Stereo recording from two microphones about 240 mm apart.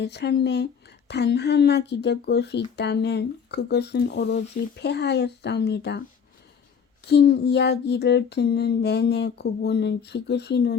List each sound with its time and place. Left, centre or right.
0.0 s child singing: left